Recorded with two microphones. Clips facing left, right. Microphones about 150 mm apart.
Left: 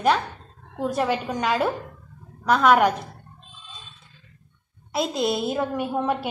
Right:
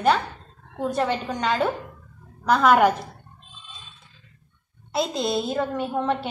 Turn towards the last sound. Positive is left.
turn(degrees=10)  # may be behind; listen again after turning